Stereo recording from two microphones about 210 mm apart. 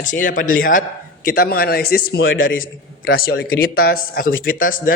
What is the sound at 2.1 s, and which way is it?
Speech, 70° left (ahead or behind).